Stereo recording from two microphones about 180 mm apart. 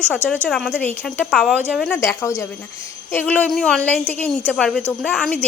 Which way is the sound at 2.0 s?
15° left (ahead or behind).